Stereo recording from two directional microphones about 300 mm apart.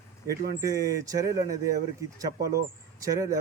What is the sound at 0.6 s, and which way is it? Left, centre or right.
Speech, centre.